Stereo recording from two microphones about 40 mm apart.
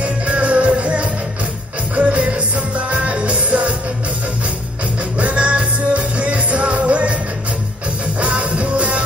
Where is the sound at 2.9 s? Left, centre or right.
Right.